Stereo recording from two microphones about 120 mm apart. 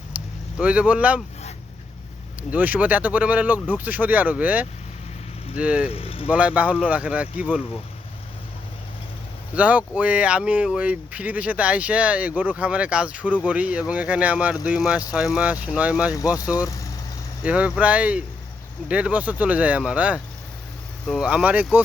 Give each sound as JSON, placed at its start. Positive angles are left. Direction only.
{"t": 0.1, "sound": "vehicle", "side_deg": -15}
{"t": 0.6, "sound": "speech", "side_deg": -10}
{"t": 2.5, "sound": "speech", "side_deg": -15}
{"t": 5.9, "sound": "speech", "side_deg": 55}
{"t": 6.3, "sound": "speech", "side_deg": -10}
{"t": 9.6, "sound": "speech", "side_deg": -10}
{"t": 16.1, "sound": "speech", "side_deg": 30}
{"t": 17.4, "sound": "speech", "side_deg": -10}